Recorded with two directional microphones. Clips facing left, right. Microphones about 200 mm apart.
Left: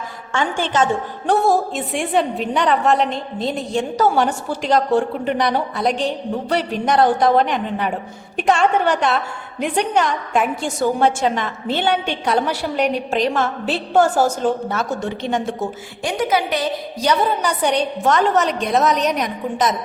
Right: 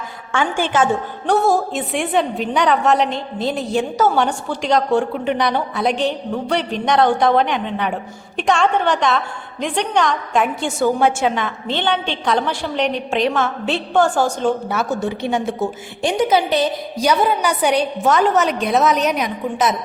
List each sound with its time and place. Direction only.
0.3 s a woman's voice: 10° right (ahead or behind)
14.7 s a woman's voice: 10° right (ahead or behind)
16.0 s a woman's voice: 25° right (ahead or behind)
17.0 s a woman's voice: 10° right (ahead or behind)